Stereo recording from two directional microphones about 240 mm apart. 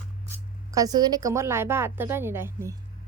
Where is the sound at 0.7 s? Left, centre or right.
Centre.